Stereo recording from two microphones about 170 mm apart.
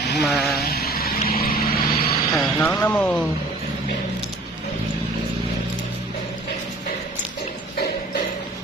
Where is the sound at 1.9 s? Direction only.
35° left (ahead or behind).